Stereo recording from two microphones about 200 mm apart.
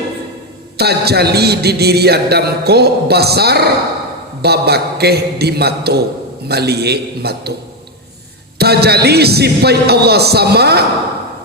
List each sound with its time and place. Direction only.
0.8 s a man's voice: 55° right (ahead or behind)
8.5 s a man's voice: 55° right (ahead or behind)